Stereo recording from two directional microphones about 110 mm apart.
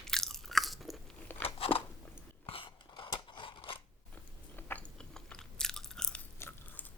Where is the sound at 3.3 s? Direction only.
50° left (ahead or behind).